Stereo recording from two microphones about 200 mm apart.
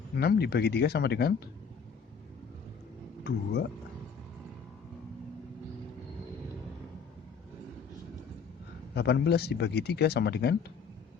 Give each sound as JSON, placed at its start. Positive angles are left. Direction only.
{"t": 0.2, "sound": "speech", "side_deg": 55}
{"t": 3.2, "sound": "speech", "side_deg": 55}
{"t": 9.0, "sound": "speech", "side_deg": 55}